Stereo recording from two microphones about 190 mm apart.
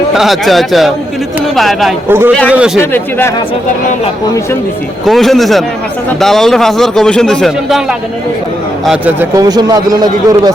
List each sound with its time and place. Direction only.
0.1 s a man's voice: centre (ahead or behind)
2.0 s a man's voice: 10° right (ahead or behind)
2.9 s speech: 10° left (ahead or behind)
5.0 s a man's voice: centre (ahead or behind)
9.3 s a man's voice: 20° right (ahead or behind)